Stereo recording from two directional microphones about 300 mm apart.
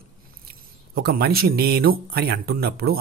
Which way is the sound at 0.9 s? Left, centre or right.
Right.